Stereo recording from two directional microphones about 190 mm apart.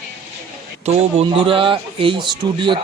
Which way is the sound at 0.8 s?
30° right (ahead or behind).